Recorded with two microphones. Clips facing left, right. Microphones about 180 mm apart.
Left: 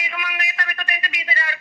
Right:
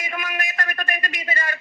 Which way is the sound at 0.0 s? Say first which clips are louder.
Right 1 dB; 45° right (ahead or behind).